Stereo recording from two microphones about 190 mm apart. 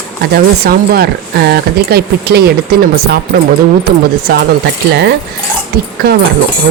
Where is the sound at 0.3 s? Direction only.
50° right (ahead or behind).